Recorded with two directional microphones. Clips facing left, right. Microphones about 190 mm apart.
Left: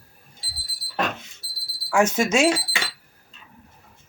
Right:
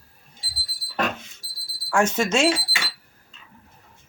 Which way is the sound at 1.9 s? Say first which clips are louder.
Left 1 dB; 5° left (ahead or behind).